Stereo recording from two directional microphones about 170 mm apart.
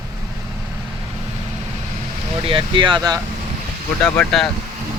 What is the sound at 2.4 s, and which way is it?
Speech, 30° right (ahead or behind).